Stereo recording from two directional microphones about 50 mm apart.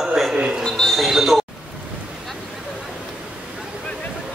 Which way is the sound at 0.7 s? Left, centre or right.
Centre.